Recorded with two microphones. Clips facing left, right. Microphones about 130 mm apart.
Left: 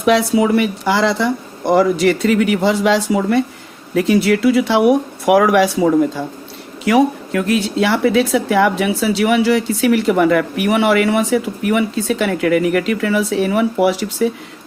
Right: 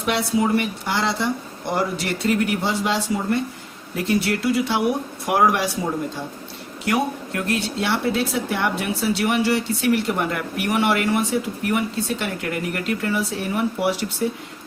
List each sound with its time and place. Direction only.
0.0 s speech: 90° left